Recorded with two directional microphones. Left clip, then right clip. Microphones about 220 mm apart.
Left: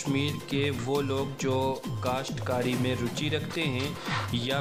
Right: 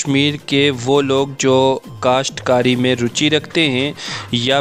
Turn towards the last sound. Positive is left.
turn(degrees=-50)  # may be behind; listen again after turning